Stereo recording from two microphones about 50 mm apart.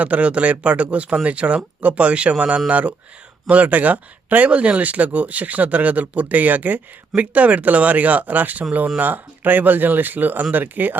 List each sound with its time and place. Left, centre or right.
0.0 s speech: right